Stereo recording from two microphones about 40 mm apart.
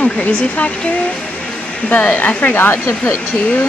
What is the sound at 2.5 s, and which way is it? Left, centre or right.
Speech, left.